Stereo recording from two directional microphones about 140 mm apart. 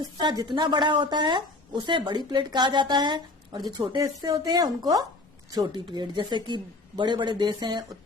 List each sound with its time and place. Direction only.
0.0 s speech: 30° right (ahead or behind)